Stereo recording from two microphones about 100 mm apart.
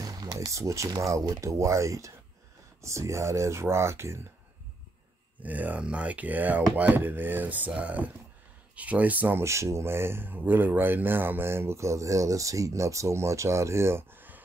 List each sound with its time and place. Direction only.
0.0 s a sound: 35° right (ahead or behind)
0.5 s speech: 30° right (ahead or behind)
5.4 s speech: 15° right (ahead or behind)
9.4 s speech: 30° right (ahead or behind)